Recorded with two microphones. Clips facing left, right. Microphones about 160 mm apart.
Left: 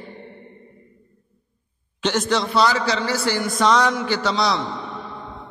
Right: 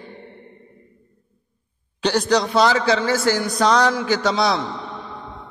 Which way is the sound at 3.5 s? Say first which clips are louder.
Left 1 dB; 35° right (ahead or behind).